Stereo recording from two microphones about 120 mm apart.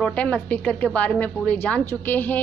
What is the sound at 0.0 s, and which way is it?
Speech, 10° left (ahead or behind).